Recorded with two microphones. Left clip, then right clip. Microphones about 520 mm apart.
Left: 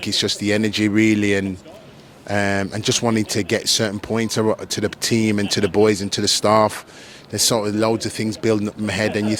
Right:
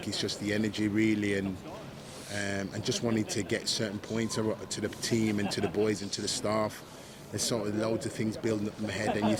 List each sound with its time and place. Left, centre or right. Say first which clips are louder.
0.0 s speech: left 13 dB; left